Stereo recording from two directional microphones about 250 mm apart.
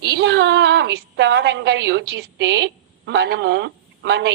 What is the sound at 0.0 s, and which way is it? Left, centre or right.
A woman's voice, right.